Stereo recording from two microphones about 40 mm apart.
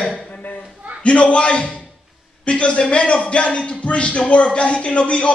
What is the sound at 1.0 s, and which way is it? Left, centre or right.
Speech, left.